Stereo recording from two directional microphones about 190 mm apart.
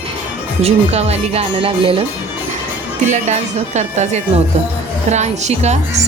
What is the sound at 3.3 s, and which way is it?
Speech, 35° right (ahead or behind).